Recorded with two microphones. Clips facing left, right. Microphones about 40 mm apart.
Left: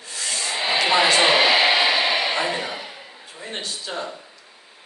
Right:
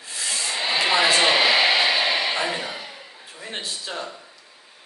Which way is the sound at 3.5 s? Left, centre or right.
Centre.